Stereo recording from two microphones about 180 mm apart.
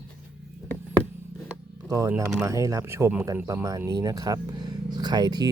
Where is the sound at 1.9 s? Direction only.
15° right (ahead or behind).